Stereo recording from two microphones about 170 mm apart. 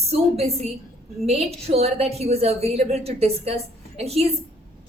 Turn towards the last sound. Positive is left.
turn(degrees=-35)  # may be behind; listen again after turning